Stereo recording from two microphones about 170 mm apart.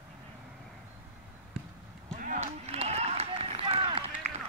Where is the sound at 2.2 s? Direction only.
45° right (ahead or behind).